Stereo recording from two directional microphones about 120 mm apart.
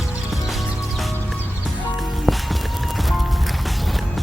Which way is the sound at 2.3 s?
Centre (ahead or behind).